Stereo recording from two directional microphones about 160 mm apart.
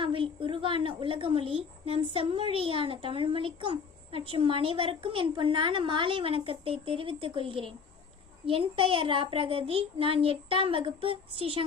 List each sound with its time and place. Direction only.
0.0 s a woman's voice: 35° right (ahead or behind)